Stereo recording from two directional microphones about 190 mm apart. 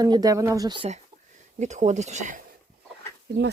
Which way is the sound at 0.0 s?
20° right (ahead or behind).